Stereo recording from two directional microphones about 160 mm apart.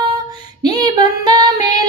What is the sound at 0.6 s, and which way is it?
Female singing, 25° right (ahead or behind).